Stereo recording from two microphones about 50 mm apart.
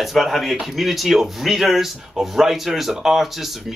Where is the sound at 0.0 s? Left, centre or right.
Centre.